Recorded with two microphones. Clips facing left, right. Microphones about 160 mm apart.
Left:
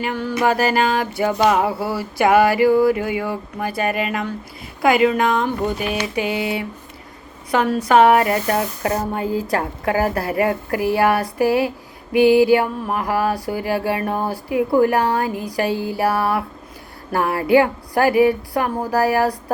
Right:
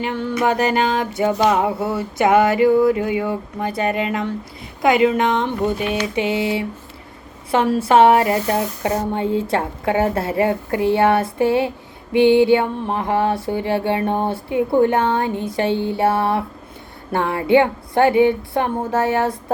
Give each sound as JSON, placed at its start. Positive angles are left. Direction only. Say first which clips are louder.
{"t": 0.0, "sound": "mantra", "louder": "even", "side_deg": -25}
{"t": 7.8, "sound": "mantra", "louder": "even", "side_deg": -30}